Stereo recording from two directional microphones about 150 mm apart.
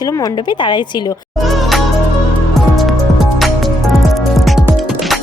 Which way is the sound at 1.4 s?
Centre (ahead or behind).